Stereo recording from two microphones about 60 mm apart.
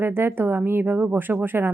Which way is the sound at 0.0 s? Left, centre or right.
Right.